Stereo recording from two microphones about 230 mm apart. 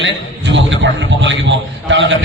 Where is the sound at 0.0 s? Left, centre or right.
Right.